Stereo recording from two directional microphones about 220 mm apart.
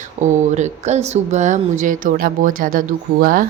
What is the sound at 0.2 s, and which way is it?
Speech, 35° right (ahead or behind).